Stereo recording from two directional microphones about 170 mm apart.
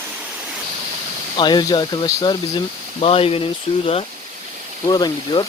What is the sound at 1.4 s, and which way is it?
Speech, 25° left (ahead or behind).